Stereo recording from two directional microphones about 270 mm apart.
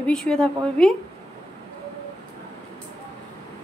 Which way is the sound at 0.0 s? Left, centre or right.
Centre.